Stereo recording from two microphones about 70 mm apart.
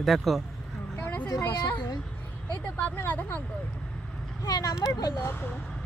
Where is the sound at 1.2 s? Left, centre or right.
Left.